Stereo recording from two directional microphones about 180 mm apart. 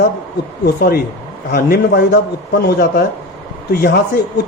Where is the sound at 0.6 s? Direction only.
60° left (ahead or behind).